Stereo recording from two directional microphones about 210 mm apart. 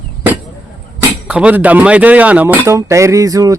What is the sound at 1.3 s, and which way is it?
Speech, 5° right (ahead or behind).